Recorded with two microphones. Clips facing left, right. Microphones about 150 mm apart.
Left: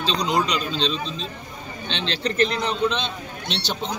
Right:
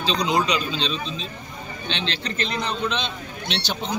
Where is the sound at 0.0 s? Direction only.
5° right (ahead or behind).